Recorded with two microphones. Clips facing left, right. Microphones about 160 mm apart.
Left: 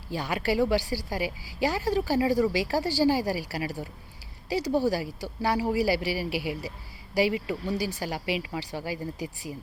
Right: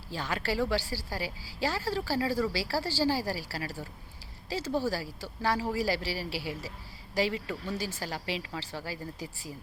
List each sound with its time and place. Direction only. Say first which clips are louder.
0.1 s speech: left 5 dB; 15° left (ahead or behind)